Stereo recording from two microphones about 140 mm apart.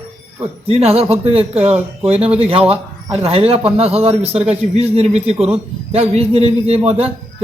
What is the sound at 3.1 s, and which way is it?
A man's voice, 45° right (ahead or behind).